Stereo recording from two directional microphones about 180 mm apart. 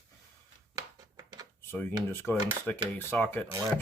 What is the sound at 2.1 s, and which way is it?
Speech, 10° left (ahead or behind).